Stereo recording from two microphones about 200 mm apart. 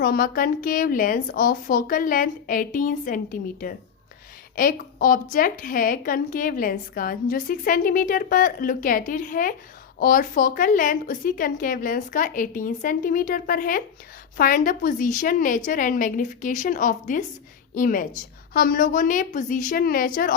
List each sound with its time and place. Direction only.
0.0 s a woman's voice: 45° left (ahead or behind)